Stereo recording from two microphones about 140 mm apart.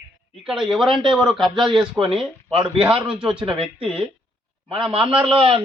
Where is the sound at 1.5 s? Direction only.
35° right (ahead or behind).